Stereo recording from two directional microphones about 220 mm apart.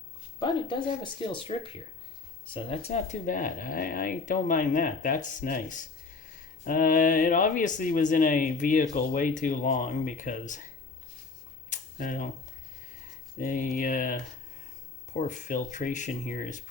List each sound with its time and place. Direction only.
0.3 s speech: 20° left (ahead or behind)
11.7 s camera: 40° left (ahead or behind)
13.4 s speech: 35° left (ahead or behind)